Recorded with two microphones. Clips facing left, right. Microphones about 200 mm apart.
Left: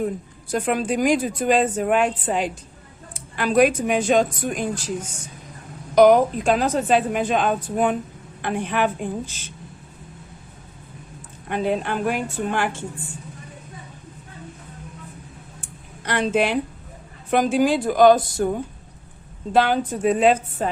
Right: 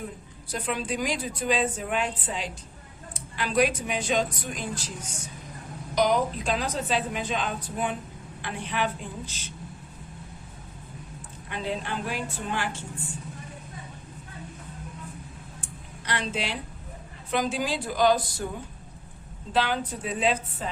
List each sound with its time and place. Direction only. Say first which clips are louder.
0.5 s a woman's voice: left 8 dB; 50° left (ahead or behind)
5.9 s a woman's voice: left 10 dB; 55° left (ahead or behind)
11.4 s a woman's voice: left 9 dB; 55° left (ahead or behind)
16.0 s a woman's voice: left 10 dB; 50° left (ahead or behind)
19.5 s a woman's voice: left 7 dB; 50° left (ahead or behind)